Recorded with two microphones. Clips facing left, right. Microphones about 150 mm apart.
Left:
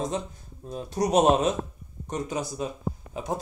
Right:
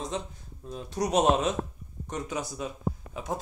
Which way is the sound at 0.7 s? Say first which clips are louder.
Left 4 dB; 40° left (ahead or behind).